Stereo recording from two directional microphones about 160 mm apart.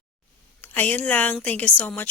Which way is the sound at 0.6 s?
10° left (ahead or behind).